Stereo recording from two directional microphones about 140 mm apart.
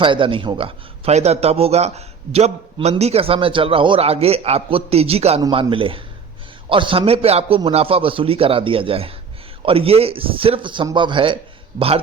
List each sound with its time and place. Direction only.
0.0 s a man's voice: 35° right (ahead or behind)